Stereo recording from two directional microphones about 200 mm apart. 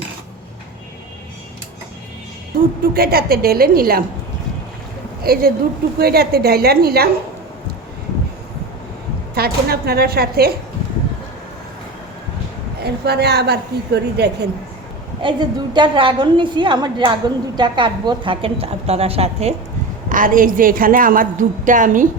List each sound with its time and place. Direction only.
2.9 s a woman's voice: 50° right (ahead or behind)
5.2 s a woman's voice: 50° right (ahead or behind)
9.3 s a woman's voice: 50° right (ahead or behind)
12.8 s a woman's voice: 55° right (ahead or behind)
15.2 s a woman's voice: 25° right (ahead or behind)
20.1 s a woman's voice: 40° right (ahead or behind)